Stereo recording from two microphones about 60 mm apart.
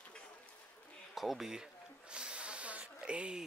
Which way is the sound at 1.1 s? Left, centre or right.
Centre.